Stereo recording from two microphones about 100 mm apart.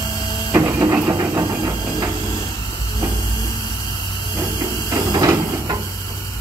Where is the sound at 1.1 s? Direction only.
25° right (ahead or behind).